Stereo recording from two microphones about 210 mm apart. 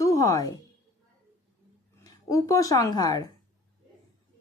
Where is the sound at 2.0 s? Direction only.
15° left (ahead or behind).